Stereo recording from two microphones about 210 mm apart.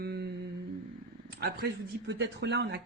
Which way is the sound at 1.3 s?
50° right (ahead or behind).